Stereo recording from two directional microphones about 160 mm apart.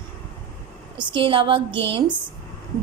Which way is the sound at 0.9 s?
30° right (ahead or behind).